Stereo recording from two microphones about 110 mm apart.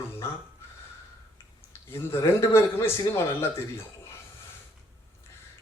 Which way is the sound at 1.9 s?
20° left (ahead or behind).